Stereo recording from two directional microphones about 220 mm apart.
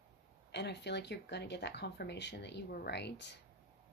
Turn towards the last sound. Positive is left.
turn(degrees=50)  # may be behind; listen again after turning